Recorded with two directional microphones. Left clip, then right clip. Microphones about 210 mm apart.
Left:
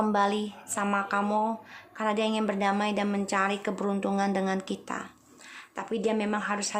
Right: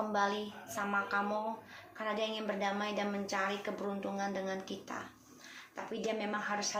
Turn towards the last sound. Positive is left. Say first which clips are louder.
# left 6 dB
turn(degrees=50)  # may be behind; listen again after turning